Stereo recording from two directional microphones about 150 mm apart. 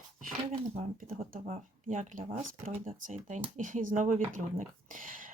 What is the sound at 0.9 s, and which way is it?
Speech, 65° right (ahead or behind).